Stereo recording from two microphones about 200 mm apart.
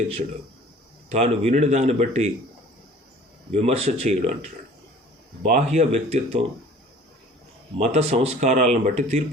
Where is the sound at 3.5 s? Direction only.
30° right (ahead or behind).